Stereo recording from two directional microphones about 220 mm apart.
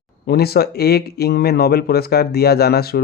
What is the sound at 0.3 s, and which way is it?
Speech, 45° left (ahead or behind).